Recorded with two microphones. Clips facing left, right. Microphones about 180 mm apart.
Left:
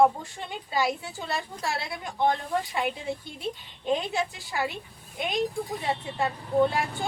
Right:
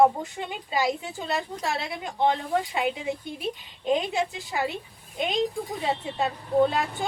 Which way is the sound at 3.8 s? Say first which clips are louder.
Right 2 dB; 20° right (ahead or behind).